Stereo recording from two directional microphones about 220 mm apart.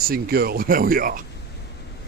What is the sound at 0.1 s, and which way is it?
Speech, 45° right (ahead or behind).